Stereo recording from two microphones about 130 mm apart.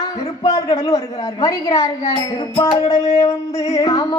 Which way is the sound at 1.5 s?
25° left (ahead or behind).